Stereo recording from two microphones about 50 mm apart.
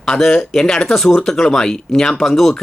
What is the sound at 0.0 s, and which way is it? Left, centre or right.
Speech, centre.